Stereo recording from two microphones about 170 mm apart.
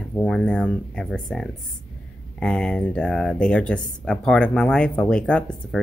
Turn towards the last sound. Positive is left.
turn(degrees=5)  # may be behind; listen again after turning